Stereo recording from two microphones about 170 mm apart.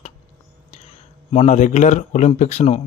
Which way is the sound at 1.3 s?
45° left (ahead or behind).